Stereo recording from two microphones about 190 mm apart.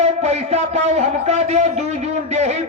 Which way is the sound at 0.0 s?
35° right (ahead or behind).